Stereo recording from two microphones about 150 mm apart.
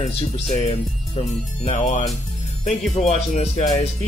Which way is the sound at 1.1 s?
45° left (ahead or behind).